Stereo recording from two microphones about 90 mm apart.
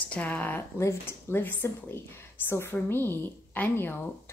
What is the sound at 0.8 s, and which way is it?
A woman's voice, 30° left (ahead or behind).